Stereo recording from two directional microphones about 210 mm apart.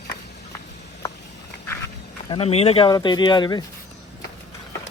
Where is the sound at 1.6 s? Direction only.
10° left (ahead or behind).